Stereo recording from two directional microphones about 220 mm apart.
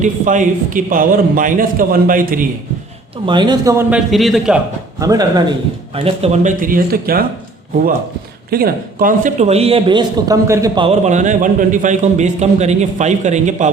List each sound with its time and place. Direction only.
0.0 s speech: 35° right (ahead or behind)
3.2 s a man's voice: 20° right (ahead or behind); by 4.6 s centre (ahead or behind)
4.9 s speech: 15° right (ahead or behind); by 7.3 s 40° right (ahead or behind)
8.4 s speech: 40° right (ahead or behind)